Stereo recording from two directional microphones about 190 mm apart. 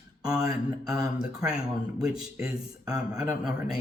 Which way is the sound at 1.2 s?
5° right (ahead or behind).